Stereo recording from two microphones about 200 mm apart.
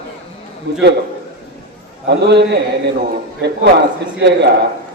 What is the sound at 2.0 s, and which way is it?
Speech, 60° right (ahead or behind).